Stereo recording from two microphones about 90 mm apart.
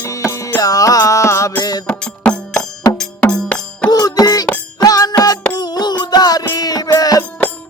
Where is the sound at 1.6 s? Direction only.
45° left (ahead or behind).